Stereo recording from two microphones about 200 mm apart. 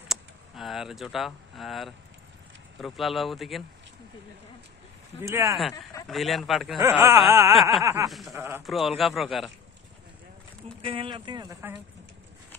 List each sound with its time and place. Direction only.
0.1 s speech: centre (ahead or behind)
5.2 s speech: 15° right (ahead or behind)
6.0 s speech: centre (ahead or behind)
6.8 s speech: 15° right (ahead or behind)
8.1 s speech: centre (ahead or behind)
10.8 s speech: 25° right (ahead or behind)